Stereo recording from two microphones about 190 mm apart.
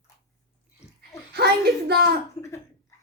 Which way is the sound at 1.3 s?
60° right (ahead or behind).